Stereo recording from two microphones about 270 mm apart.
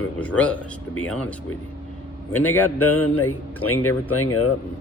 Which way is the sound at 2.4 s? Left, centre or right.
Centre.